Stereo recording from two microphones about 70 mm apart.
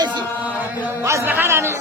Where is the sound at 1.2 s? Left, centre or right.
Right.